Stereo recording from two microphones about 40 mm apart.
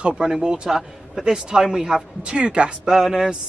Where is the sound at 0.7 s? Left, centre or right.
Centre.